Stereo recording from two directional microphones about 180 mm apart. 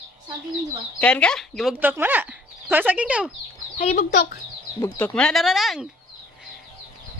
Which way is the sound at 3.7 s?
45° left (ahead or behind).